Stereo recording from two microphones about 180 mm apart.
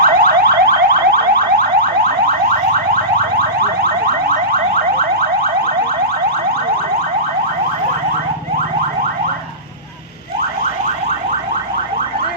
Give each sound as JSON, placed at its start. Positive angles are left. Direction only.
{"t": 0.0, "sound": "car alarm", "side_deg": -55}
{"t": 3.3, "sound": "car alarm", "side_deg": -60}